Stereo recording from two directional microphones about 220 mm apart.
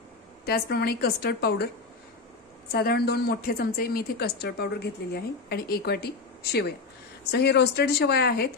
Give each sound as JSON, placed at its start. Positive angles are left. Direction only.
{"t": 0.5, "sound": "a woman's voice", "side_deg": 45}
{"t": 2.7, "sound": "a woman's voice", "side_deg": 45}
{"t": 7.2, "sound": "a woman's voice", "side_deg": 50}